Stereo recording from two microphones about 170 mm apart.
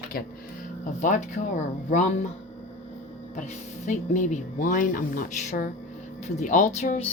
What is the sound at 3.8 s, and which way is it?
Speech, 45° left (ahead or behind).